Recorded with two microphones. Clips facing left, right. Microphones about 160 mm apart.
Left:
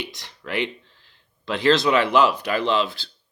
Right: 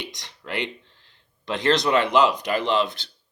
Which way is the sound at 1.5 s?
20° right (ahead or behind).